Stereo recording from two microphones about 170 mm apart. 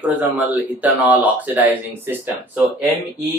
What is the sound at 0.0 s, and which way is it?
Speech, 10° right (ahead or behind).